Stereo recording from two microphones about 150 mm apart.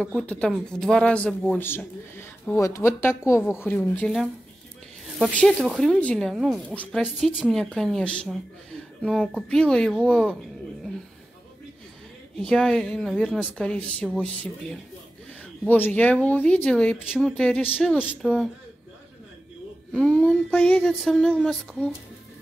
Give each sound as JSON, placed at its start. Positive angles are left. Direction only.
{"t": 0.0, "sound": "speech", "side_deg": 5}
{"t": 5.3, "sound": "speech", "side_deg": 5}
{"t": 6.8, "sound": "speech", "side_deg": 10}
{"t": 7.2, "sound": "speech", "side_deg": -5}
{"t": 12.4, "sound": "speech", "side_deg": 5}
{"t": 17.7, "sound": "speech", "side_deg": -5}
{"t": 19.9, "sound": "speech", "side_deg": 5}